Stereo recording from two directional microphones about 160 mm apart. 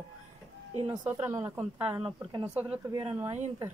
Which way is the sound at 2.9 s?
30° right (ahead or behind).